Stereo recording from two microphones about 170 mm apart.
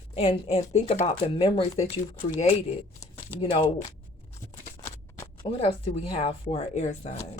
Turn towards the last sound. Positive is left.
turn(degrees=40)  # may be behind; listen again after turning